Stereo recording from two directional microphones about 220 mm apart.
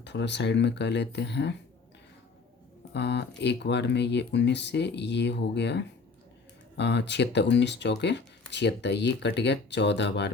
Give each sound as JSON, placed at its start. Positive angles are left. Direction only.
{"t": 0.0, "sound": "speech", "side_deg": 55}
{"t": 2.9, "sound": "speech", "side_deg": 50}